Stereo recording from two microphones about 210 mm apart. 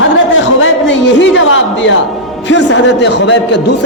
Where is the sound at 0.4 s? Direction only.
60° left (ahead or behind).